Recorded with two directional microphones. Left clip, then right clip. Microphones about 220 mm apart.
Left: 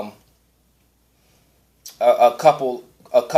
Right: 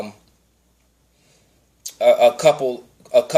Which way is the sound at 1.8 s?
25° right (ahead or behind).